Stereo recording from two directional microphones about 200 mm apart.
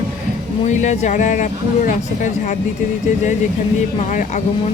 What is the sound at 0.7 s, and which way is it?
Speech, 35° left (ahead or behind).